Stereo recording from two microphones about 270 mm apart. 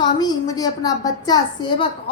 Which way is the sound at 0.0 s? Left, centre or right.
Centre.